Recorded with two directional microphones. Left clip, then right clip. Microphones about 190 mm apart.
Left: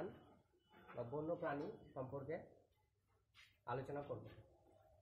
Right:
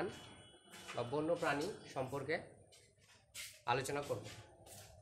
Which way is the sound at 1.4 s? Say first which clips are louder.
Right 7 dB; 25° right (ahead or behind).